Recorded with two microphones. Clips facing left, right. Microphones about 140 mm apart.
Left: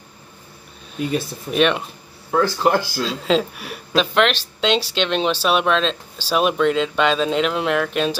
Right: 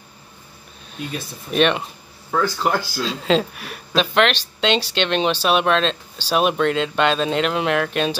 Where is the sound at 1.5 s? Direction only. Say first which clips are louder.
Even; centre (ahead or behind).